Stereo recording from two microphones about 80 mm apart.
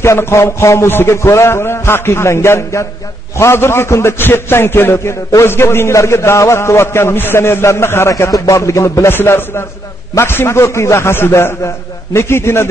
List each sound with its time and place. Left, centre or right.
0.0 s a man's voice: left